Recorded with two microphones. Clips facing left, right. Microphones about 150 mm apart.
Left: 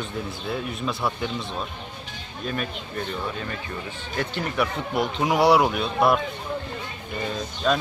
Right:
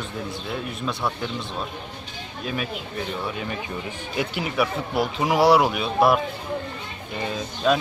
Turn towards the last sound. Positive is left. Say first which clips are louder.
# right 2 dB
turn(degrees=-5)  # may be behind; listen again after turning